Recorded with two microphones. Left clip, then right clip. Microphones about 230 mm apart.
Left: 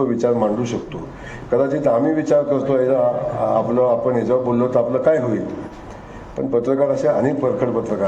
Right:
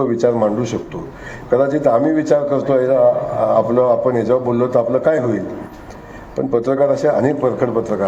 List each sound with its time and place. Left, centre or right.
0.2 s a man's voice: right